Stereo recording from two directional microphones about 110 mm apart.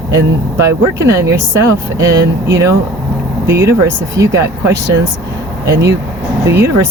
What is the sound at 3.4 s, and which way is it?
Speech, 25° right (ahead or behind).